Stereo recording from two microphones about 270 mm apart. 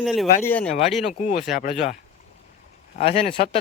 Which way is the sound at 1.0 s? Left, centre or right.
Left.